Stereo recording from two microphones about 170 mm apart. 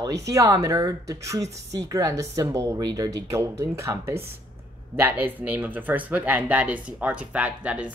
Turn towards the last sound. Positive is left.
turn(degrees=-10)  # may be behind; listen again after turning